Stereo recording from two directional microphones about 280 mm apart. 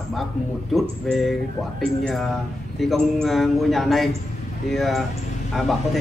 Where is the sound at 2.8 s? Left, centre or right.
Centre.